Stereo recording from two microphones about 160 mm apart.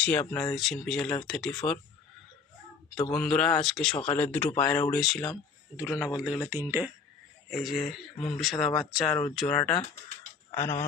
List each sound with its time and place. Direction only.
0.0 s speech: 10° left (ahead or behind)
3.0 s speech: 5° left (ahead or behind); by 6.9 s 15° right (ahead or behind)
7.5 s speech: centre (ahead or behind)
10.5 s speech: 15° left (ahead or behind)